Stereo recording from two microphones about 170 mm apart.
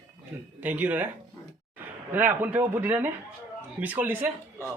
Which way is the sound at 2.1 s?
10° right (ahead or behind).